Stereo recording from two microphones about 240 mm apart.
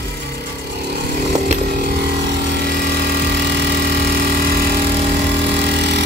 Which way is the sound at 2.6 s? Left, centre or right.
Right.